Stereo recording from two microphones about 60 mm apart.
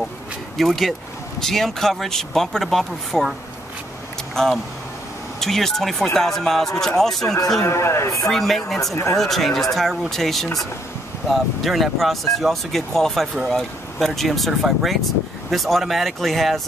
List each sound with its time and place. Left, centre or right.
0.6 s speech: centre
4.4 s speech: centre
7.6 s speech: left
8.3 s speech: centre